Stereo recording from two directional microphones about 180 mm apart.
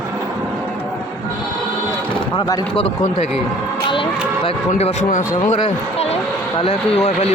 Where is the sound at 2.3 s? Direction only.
30° left (ahead or behind).